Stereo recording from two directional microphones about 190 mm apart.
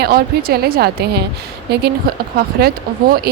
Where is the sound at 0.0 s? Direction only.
55° right (ahead or behind).